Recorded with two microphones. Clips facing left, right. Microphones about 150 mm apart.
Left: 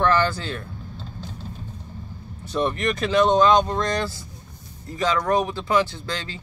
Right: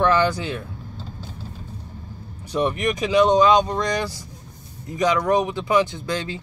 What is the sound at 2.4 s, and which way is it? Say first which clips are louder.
Speech: right 1 dB; 10° right (ahead or behind).